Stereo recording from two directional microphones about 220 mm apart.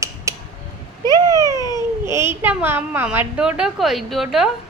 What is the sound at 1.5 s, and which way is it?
Babbling, 15° left (ahead or behind).